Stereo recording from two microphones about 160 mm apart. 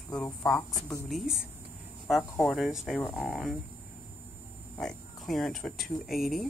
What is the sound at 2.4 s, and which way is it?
Speech, centre (ahead or behind).